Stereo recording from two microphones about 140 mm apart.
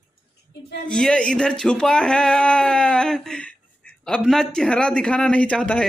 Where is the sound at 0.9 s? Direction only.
5° left (ahead or behind).